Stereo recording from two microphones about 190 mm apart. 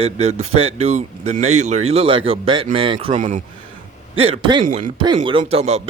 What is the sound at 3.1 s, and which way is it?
Speech, 40° right (ahead or behind).